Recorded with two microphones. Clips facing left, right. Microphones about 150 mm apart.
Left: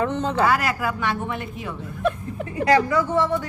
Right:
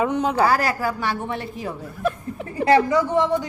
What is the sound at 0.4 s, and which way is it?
A woman's voice, 35° right (ahead or behind).